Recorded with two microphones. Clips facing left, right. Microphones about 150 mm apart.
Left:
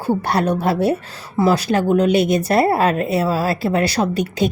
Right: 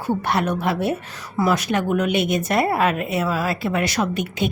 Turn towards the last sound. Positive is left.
turn(degrees=35)  # may be behind; listen again after turning